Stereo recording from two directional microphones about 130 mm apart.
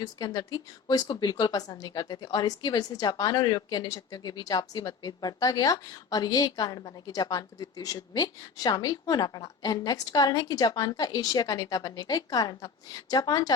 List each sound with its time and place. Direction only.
0.0 s a woman's voice: 30° left (ahead or behind)